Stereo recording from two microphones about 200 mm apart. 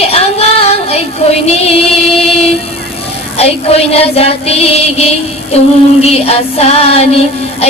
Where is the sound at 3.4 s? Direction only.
30° left (ahead or behind).